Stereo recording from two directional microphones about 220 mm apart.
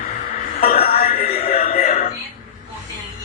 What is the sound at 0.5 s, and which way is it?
Music, 40° left (ahead or behind).